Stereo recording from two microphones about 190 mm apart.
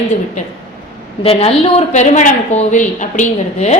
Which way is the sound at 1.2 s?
30° left (ahead or behind).